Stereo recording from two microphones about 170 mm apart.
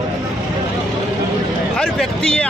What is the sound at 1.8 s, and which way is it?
Speech, 5° left (ahead or behind).